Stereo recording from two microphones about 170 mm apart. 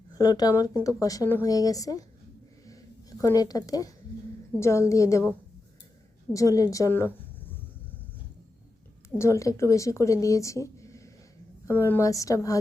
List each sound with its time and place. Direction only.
0.1 s speech: 20° left (ahead or behind)
2.6 s a sound: 20° left (ahead or behind)
4.6 s a woman's voice: 15° left (ahead or behind)
6.3 s speech: 20° left (ahead or behind)
9.0 s speech: 15° left (ahead or behind)